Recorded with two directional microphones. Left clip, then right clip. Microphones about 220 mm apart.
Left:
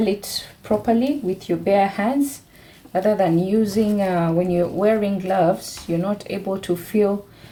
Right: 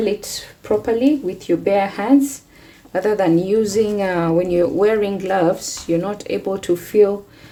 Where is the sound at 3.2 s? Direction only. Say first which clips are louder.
Right 3 dB; 45° right (ahead or behind).